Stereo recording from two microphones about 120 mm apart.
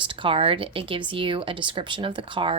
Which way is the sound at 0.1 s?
45° right (ahead or behind).